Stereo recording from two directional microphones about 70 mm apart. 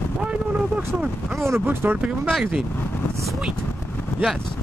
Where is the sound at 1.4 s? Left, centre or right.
Right.